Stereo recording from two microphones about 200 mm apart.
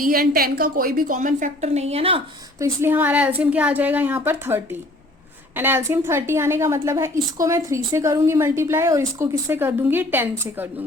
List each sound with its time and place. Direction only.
0.0 s a woman's voice: 50° right (ahead or behind); by 2.2 s 30° right (ahead or behind)
2.6 s a woman's voice: 15° right (ahead or behind)